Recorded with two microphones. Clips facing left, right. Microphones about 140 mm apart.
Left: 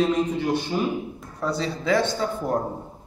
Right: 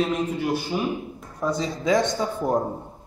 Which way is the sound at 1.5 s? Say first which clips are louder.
Right 1 dB; 15° right (ahead or behind).